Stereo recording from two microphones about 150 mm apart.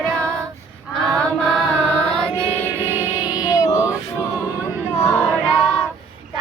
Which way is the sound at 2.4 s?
10° left (ahead or behind).